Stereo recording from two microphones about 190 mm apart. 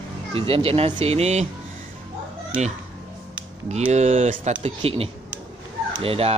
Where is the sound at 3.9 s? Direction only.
35° right (ahead or behind).